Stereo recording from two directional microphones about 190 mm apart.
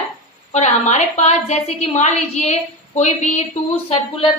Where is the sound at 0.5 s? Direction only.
35° left (ahead or behind).